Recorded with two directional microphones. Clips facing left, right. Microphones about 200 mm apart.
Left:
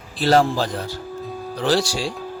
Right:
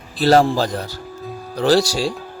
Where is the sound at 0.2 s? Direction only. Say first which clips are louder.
Right 3 dB; 40° right (ahead or behind).